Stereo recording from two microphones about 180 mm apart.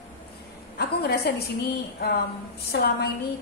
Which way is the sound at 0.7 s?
65° left (ahead or behind).